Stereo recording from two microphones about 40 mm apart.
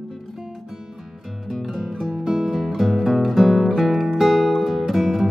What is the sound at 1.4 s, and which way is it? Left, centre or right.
Music, centre.